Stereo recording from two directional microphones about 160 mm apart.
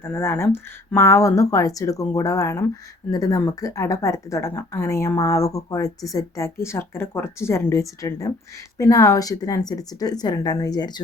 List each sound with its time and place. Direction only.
0.0 s speech: 15° left (ahead or behind)